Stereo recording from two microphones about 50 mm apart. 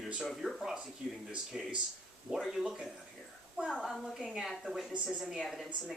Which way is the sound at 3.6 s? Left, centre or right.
Right.